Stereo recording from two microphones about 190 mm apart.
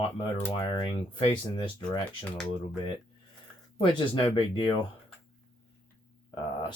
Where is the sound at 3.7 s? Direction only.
25° left (ahead or behind).